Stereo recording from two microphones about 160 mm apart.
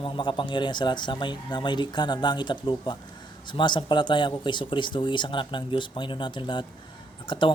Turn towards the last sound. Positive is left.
turn(degrees=30)  # may be behind; listen again after turning